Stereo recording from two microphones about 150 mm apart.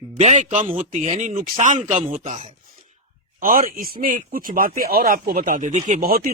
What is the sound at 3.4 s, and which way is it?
Speech, 70° right (ahead or behind).